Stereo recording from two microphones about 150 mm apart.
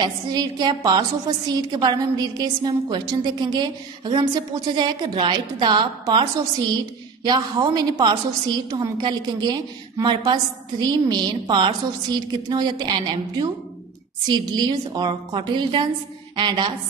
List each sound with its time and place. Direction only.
0.0 s a woman's voice: 30° right (ahead or behind)
7.2 s a woman's voice: 30° right (ahead or behind)